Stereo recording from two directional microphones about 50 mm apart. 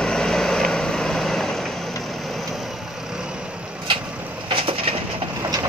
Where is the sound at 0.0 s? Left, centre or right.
Centre.